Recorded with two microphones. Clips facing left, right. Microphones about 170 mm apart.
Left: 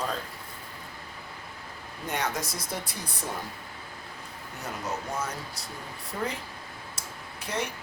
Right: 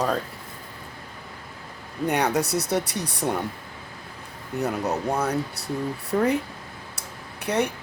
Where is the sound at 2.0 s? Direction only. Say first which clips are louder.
Right 9 dB; 65° right (ahead or behind).